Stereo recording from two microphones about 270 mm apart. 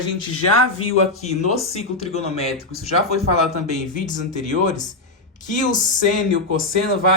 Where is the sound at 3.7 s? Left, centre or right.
Left.